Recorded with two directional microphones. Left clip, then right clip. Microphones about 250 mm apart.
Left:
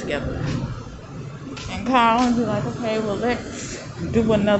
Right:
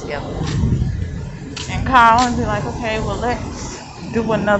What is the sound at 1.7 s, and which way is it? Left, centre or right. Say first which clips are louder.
A woman's voice: right 6 dB; centre.